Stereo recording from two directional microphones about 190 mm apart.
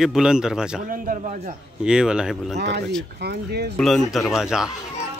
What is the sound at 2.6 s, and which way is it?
Speech, 60° right (ahead or behind).